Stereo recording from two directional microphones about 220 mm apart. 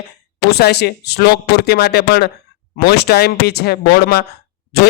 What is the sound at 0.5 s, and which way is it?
A man's voice, 50° left (ahead or behind).